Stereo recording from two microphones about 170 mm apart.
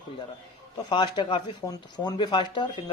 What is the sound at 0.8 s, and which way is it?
A man's voice, 25° left (ahead or behind).